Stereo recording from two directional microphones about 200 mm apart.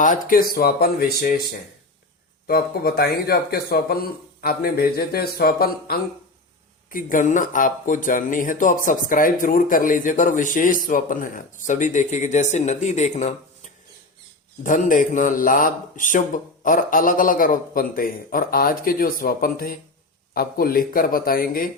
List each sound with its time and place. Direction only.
0.0 s speech: 40° left (ahead or behind)
2.5 s speech: 50° left (ahead or behind)